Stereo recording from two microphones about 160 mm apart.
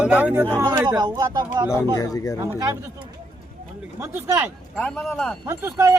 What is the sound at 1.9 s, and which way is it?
Speech, 20° left (ahead or behind).